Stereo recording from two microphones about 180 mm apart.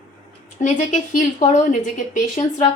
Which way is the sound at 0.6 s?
40° left (ahead or behind).